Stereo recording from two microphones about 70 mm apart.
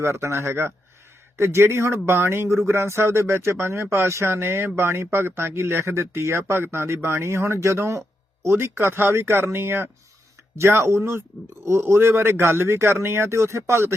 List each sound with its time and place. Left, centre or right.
0.0 s speech: right